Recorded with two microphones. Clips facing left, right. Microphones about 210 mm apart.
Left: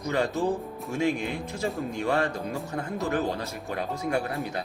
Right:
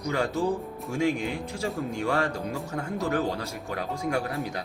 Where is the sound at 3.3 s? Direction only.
10° right (ahead or behind).